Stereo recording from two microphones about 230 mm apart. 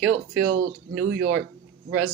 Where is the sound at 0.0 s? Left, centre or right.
Right.